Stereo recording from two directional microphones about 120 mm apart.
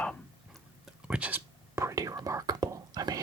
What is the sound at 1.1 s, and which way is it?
Whispering, 10° right (ahead or behind).